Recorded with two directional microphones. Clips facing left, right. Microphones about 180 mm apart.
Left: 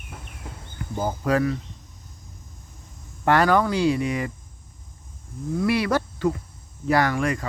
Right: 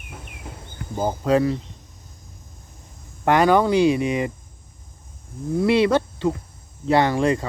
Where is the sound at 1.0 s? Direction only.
25° right (ahead or behind).